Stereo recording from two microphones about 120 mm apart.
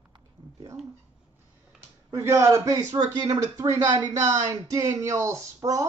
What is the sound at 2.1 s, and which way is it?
Speech, 25° right (ahead or behind).